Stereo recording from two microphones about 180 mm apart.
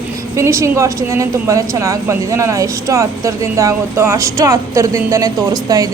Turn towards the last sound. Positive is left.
turn(degrees=-20)  # may be behind; listen again after turning